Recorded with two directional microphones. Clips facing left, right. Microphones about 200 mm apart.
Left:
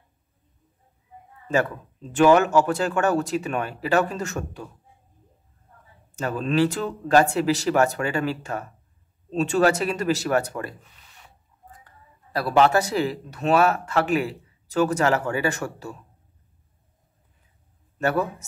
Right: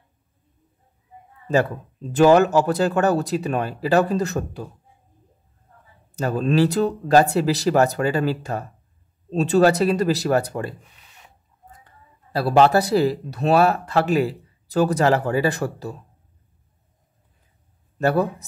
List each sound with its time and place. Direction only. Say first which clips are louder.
2.1 s speech: right 2 dB; 40° right (ahead or behind)
6.1 s speech: right 3 dB; 40° right (ahead or behind)
11.8 s speech: right 1 dB; 30° right (ahead or behind)
17.9 s speech: right 4 dB; 35° right (ahead or behind)